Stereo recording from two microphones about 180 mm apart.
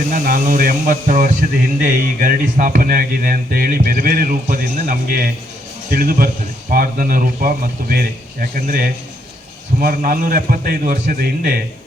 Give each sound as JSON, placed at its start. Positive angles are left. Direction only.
{"t": 0.1, "sound": "speech", "side_deg": -50}